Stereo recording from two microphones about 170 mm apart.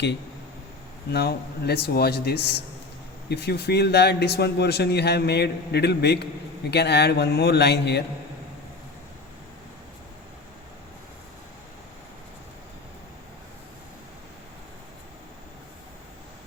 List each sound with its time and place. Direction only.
1.1 s speech: 70° left (ahead or behind)